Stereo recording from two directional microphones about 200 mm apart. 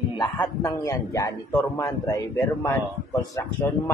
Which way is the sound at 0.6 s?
15° left (ahead or behind).